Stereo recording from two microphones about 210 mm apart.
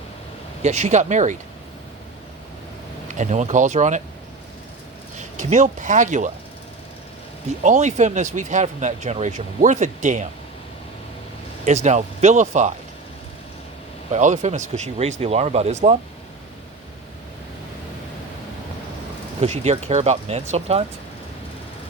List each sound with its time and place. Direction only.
0.6 s speech: 35° right (ahead or behind)
3.1 s speech: 35° right (ahead or behind)
5.1 s speech: 35° right (ahead or behind)
7.6 s speech: 35° right (ahead or behind)
11.6 s speech: 35° right (ahead or behind)
14.1 s speech: 35° right (ahead or behind)
19.4 s speech: 30° right (ahead or behind)